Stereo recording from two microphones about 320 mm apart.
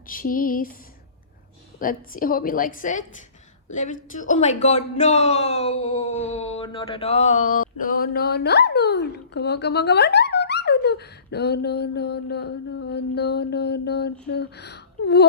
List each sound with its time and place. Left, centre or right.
0.1 s speech: left
1.8 s speech: left